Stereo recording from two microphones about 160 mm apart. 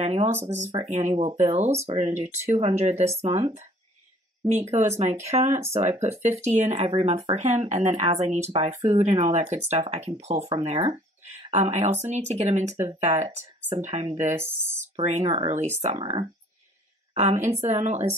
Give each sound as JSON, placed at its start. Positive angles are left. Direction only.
{"t": 0.0, "sound": "speech", "side_deg": -40}
{"t": 11.5, "sound": "speech", "side_deg": -45}
{"t": 14.3, "sound": "speech", "side_deg": -15}
{"t": 15.2, "sound": "speech", "side_deg": -30}
{"t": 15.5, "sound": "a woman's voice", "side_deg": -45}